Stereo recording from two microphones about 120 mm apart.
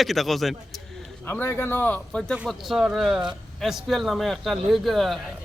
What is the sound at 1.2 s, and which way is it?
Speech, 15° left (ahead or behind).